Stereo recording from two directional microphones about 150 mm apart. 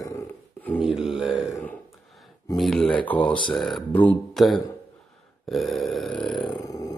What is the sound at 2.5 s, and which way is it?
Speech, 5° left (ahead or behind).